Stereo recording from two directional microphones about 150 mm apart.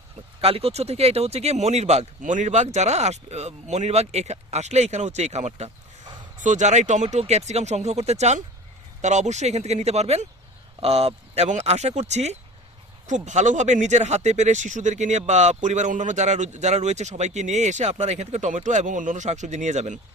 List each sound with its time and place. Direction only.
0.4 s speech: 40° right (ahead or behind)